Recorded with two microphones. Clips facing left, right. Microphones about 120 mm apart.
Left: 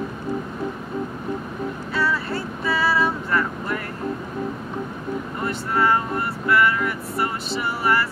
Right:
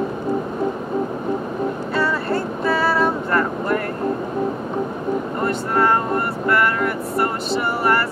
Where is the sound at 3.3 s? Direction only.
50° right (ahead or behind).